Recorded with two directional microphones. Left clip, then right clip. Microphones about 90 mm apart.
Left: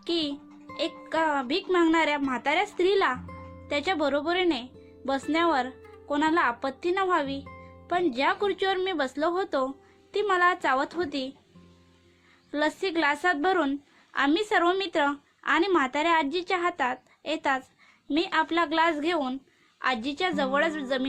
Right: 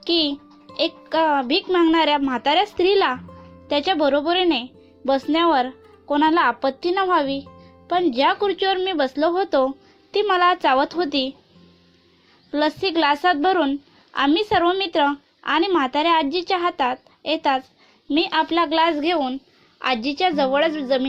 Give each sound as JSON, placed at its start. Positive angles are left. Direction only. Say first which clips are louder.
{"t": 0.0, "sound": "a child's voice", "louder": "right 9 dB", "side_deg": -30}
{"t": 12.5, "sound": "speech", "louder": "right 6 dB", "side_deg": -10}
{"t": 19.8, "sound": "speech", "louder": "right 7 dB", "side_deg": -20}